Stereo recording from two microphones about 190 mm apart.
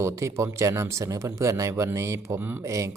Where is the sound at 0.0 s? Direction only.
15° right (ahead or behind).